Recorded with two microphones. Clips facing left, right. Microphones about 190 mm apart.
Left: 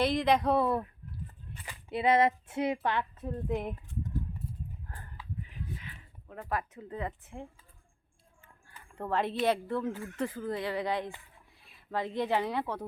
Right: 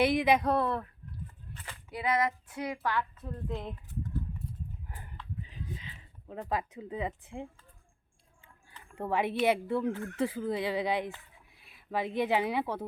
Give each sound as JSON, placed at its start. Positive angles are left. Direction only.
{"t": 0.0, "sound": "speech", "side_deg": -5}
{"t": 0.5, "sound": "speech", "side_deg": 5}
{"t": 1.9, "sound": "speech", "side_deg": 25}
{"t": 4.9, "sound": "a sound", "side_deg": -20}
{"t": 6.5, "sound": "speech", "side_deg": -15}
{"t": 9.0, "sound": "speech", "side_deg": -10}